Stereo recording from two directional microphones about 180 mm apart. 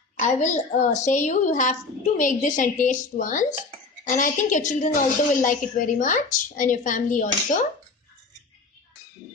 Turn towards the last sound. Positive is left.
turn(degrees=45)  # may be behind; listen again after turning